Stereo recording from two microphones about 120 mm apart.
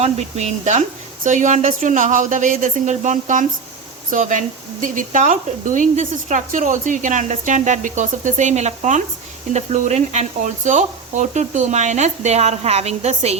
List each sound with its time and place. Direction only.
0.0 s speech: 65° right (ahead or behind)